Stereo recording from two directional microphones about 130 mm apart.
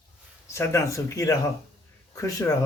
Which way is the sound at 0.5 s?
20° left (ahead or behind).